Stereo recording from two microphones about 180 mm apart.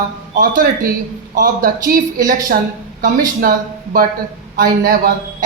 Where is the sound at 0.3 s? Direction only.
50° right (ahead or behind).